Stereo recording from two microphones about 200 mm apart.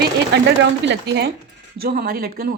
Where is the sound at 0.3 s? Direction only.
60° right (ahead or behind).